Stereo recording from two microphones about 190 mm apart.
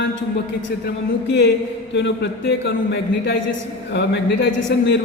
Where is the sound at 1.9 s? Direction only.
65° left (ahead or behind).